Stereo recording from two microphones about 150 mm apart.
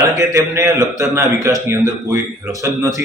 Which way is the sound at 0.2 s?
20° right (ahead or behind).